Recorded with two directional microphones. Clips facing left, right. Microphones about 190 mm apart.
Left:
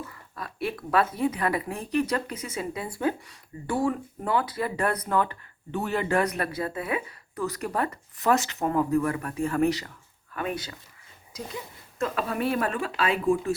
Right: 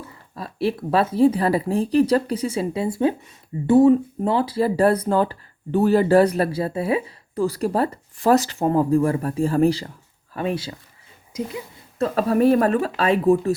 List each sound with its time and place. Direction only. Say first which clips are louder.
0.1 s speech: right 4 dB; 30° right (ahead or behind)
11.9 s speech: right 9 dB; 35° right (ahead or behind)